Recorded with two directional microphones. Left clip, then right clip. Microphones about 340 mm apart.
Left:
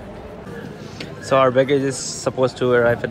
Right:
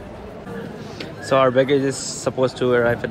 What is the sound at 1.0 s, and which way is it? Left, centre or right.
Speech, centre.